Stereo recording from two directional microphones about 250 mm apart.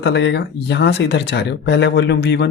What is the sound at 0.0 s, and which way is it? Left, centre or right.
Speech, left.